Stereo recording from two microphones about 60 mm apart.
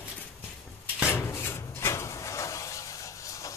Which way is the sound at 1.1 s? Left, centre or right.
Left.